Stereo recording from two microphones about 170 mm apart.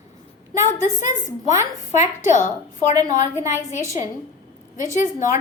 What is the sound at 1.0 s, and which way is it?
A woman's voice, 45° left (ahead or behind).